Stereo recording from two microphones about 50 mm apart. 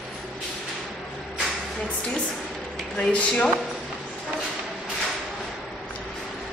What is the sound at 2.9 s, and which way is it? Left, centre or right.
Speech, left.